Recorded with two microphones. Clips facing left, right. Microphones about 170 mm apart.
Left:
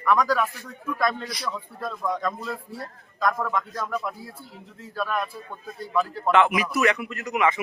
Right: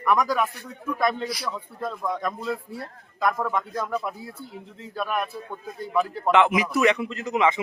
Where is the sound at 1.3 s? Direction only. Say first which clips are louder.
Right 1 dB; 5° right (ahead or behind).